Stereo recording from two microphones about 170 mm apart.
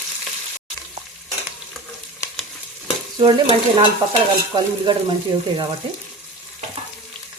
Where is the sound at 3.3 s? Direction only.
30° right (ahead or behind).